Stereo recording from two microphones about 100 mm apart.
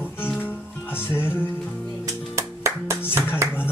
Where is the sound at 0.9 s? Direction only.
20° left (ahead or behind).